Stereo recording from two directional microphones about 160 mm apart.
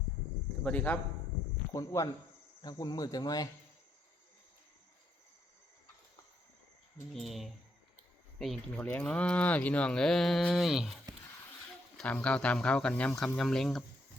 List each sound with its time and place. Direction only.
0.6 s speech: 10° left (ahead or behind)
1.7 s speech: 20° left (ahead or behind)
7.1 s speech: centre (ahead or behind)